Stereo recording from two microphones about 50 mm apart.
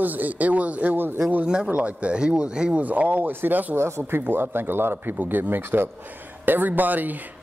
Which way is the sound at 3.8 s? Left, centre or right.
Right.